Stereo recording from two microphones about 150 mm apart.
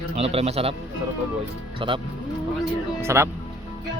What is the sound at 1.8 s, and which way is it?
Speech, 35° right (ahead or behind).